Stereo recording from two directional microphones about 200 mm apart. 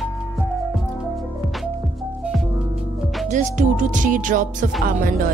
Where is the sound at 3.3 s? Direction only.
40° right (ahead or behind).